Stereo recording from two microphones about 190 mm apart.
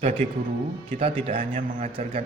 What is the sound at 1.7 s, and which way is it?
Speech, 45° right (ahead or behind).